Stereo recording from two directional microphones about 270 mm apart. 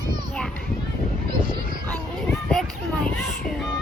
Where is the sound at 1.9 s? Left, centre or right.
Centre.